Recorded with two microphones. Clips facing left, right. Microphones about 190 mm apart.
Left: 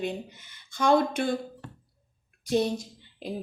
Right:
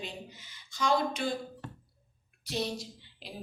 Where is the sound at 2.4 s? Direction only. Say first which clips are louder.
Left 9 dB; 50° left (ahead or behind).